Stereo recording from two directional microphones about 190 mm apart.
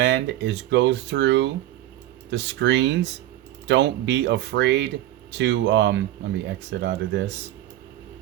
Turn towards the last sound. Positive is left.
turn(degrees=-65)  # may be behind; listen again after turning